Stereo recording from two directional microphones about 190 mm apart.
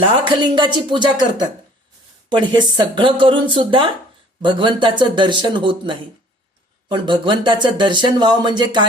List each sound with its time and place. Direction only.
0.0 s speech: 25° right (ahead or behind)
2.3 s speech: 25° right (ahead or behind)